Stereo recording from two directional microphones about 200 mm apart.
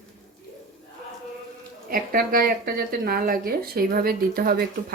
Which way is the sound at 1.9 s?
45° right (ahead or behind).